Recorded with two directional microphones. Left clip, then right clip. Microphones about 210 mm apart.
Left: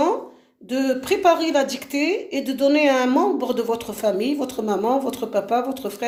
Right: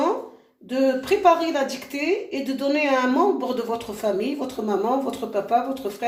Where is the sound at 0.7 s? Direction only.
45° left (ahead or behind).